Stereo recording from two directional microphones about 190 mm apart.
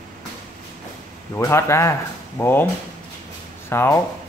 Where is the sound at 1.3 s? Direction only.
15° left (ahead or behind).